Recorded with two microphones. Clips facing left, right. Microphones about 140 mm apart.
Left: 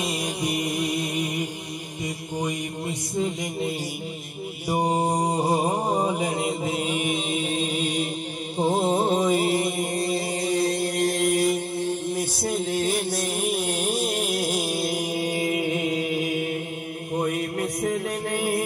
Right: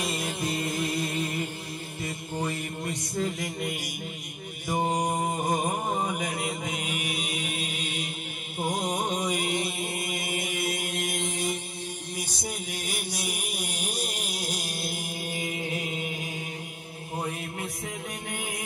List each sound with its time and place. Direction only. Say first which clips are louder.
0.0 s music: left 3 dB; 20° left (ahead or behind)
2.0 s mantra: left 3 dB; 15° left (ahead or behind)
5.3 s mantra: left 5 dB; 35° left (ahead or behind)
10.9 s chant: left 10 dB; 45° left (ahead or behind)
12.2 s music: left 9 dB; 15° right (ahead or behind)
17.2 s music: left 8 dB; 55° left (ahead or behind)